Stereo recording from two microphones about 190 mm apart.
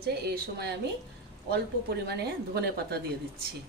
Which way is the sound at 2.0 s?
55° right (ahead or behind).